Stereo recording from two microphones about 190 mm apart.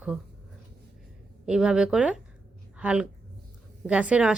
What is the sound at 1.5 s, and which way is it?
A woman's voice, 5° right (ahead or behind).